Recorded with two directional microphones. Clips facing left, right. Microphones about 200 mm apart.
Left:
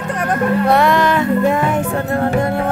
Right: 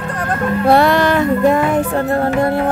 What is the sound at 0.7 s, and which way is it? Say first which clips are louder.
Music: right 5 dB; 35° right (ahead or behind).